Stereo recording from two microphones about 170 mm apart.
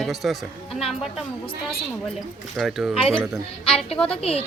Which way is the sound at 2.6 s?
Centre (ahead or behind).